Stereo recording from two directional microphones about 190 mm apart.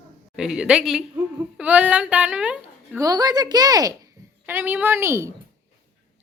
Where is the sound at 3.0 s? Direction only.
20° right (ahead or behind).